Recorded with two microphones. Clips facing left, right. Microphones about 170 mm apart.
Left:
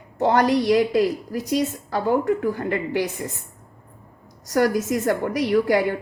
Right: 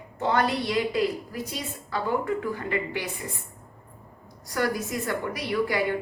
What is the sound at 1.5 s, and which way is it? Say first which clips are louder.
A woman's voice: left 11 dB; 45° left (ahead or behind).